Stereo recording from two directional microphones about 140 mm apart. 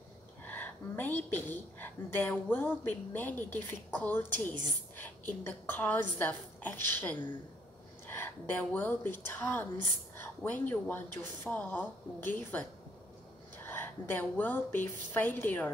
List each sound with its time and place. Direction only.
0.5 s a woman's voice: 15° left (ahead or behind)
13.7 s a woman's voice: 15° left (ahead or behind)